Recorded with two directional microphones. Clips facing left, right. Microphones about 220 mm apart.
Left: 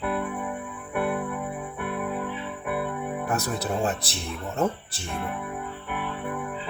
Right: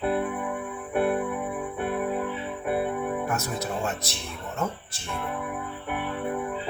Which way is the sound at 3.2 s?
35° left (ahead or behind).